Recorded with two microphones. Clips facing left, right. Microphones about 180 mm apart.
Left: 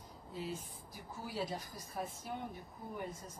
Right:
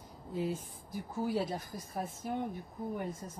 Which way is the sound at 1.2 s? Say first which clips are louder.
Right 7 dB; 50° right (ahead or behind).